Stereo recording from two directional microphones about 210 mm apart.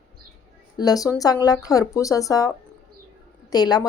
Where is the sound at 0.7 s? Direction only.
15° left (ahead or behind).